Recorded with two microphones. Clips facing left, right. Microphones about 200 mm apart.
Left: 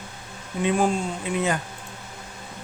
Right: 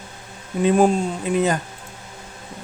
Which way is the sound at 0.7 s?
40° right (ahead or behind).